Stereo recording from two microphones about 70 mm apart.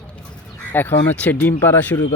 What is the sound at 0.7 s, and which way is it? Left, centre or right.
Speech, left.